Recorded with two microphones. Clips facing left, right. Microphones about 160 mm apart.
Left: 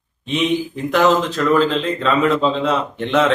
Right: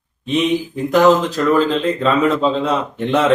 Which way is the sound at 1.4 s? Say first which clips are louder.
Right 1 dB; centre (ahead or behind).